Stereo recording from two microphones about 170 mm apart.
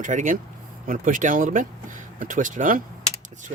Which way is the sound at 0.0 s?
50° right (ahead or behind).